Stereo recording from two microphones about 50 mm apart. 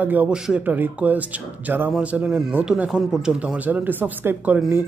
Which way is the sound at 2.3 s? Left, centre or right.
Centre.